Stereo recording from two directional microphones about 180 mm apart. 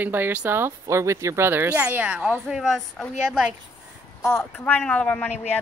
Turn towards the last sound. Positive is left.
turn(degrees=10)  # may be behind; listen again after turning